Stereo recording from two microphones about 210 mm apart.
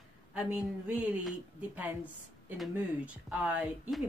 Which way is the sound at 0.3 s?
5° right (ahead or behind).